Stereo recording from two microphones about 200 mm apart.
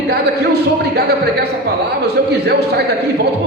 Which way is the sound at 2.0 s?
55° right (ahead or behind).